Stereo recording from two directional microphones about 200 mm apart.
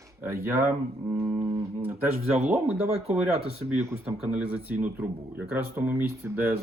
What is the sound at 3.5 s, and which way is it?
Music, 30° right (ahead or behind).